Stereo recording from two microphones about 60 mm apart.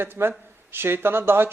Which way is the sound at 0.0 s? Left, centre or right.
Right.